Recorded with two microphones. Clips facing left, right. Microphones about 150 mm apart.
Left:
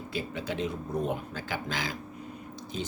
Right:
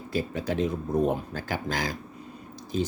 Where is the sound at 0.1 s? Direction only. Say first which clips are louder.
Right 6 dB; 40° right (ahead or behind).